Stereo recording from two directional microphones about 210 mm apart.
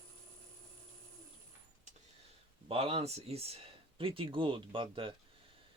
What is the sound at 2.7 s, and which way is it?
Mantra, 25° right (ahead or behind).